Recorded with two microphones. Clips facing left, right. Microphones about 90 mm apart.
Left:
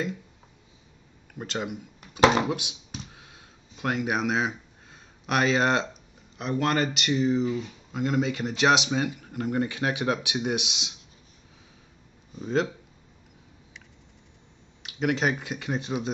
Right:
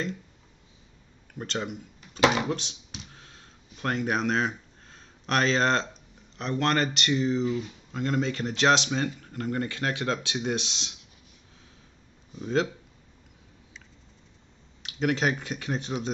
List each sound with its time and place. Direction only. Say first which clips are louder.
1.4 s speech: left 1 dB; 15° left (ahead or behind)
2.1 s speech: left 3 dB; 30° left (ahead or behind)
2.4 s computer keyboard: left 1 dB; 15° left (ahead or behind)
6.3 s speech: even; 5° left (ahead or behind)
12.4 s speech: even; 5° left (ahead or behind)
14.8 s speech: even; 5° left (ahead or behind)